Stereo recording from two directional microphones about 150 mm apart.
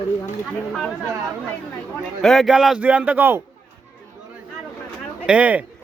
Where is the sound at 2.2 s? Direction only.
Centre (ahead or behind).